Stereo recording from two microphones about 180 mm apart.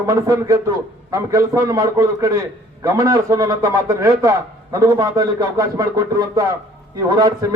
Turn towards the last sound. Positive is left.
turn(degrees=-20)  # may be behind; listen again after turning